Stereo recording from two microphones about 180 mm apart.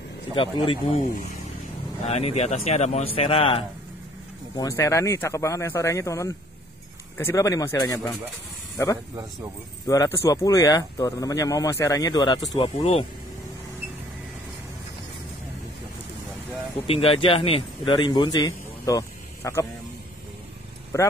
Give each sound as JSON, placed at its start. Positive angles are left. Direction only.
{"t": 0.3, "sound": "speech", "side_deg": 30}
{"t": 4.6, "sound": "speech", "side_deg": 15}
{"t": 9.8, "sound": "speech", "side_deg": 15}
{"t": 16.8, "sound": "a man's voice", "side_deg": 30}
{"t": 20.9, "sound": "speech", "side_deg": 15}